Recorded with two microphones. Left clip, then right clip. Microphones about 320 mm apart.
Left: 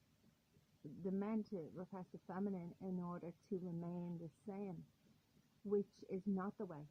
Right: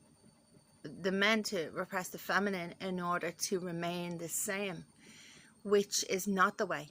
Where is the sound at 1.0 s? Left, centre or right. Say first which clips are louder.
Right 15 dB; left.